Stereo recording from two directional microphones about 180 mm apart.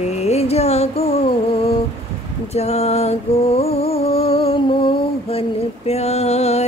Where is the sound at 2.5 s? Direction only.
35° left (ahead or behind).